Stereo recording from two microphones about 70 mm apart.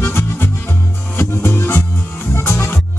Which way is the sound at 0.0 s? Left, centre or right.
Left.